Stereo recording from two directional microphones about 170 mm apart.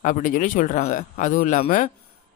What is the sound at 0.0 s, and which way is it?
Speech, 50° left (ahead or behind).